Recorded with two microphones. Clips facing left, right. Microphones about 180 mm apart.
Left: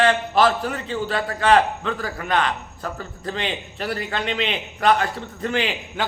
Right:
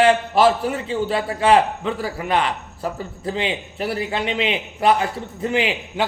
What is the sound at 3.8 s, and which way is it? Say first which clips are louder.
Speech: right 3 dB; 25° right (ahead or behind).